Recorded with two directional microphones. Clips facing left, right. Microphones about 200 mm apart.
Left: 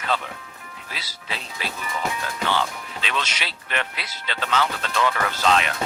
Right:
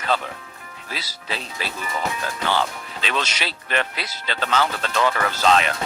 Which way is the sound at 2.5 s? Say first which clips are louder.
Right 2 dB; 35° right (ahead or behind).